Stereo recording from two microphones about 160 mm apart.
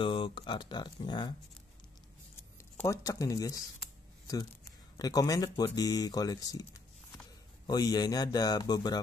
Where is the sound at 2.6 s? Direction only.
20° left (ahead or behind).